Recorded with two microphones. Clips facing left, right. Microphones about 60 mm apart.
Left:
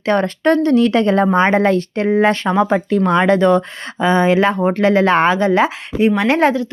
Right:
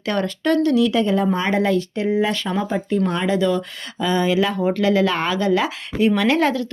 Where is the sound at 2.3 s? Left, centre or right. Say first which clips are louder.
Left 6 dB; left.